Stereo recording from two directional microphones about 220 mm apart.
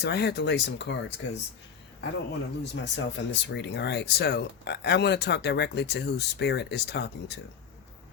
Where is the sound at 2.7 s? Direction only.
55° left (ahead or behind).